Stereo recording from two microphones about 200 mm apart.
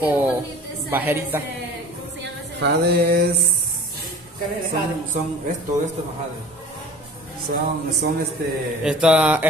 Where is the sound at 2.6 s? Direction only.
55° right (ahead or behind).